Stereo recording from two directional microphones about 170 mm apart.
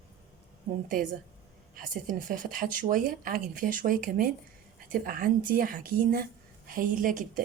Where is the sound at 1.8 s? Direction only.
55° right (ahead or behind).